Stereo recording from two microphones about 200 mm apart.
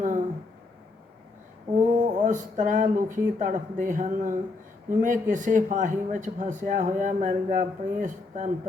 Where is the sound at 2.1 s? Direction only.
40° right (ahead or behind).